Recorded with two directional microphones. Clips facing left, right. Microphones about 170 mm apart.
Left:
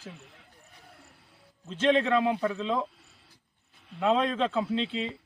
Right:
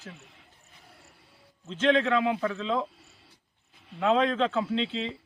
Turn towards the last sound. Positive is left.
turn(degrees=5)  # may be behind; listen again after turning